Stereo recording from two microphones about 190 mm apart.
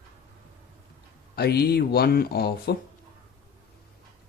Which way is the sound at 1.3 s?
55° left (ahead or behind).